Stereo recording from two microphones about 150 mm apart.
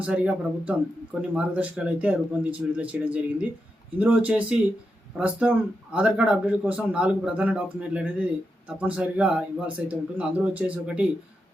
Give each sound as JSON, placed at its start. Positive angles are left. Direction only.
{"t": 0.0, "sound": "a man's voice", "side_deg": -10}